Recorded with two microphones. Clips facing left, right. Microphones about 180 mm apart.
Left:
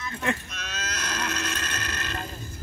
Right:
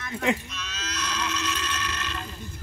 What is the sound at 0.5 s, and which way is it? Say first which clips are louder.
Moo: left 1 dB; 55° left (ahead or behind).